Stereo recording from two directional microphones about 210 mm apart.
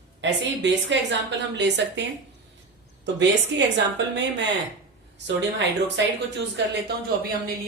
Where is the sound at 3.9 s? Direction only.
55° right (ahead or behind).